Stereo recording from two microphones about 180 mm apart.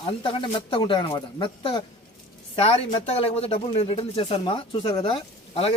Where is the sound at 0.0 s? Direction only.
30° left (ahead or behind).